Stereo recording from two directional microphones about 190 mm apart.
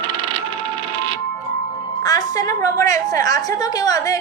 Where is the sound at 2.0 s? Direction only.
20° left (ahead or behind).